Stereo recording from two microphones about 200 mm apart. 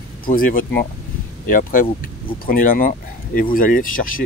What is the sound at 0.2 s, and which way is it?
Speech, 45° left (ahead or behind).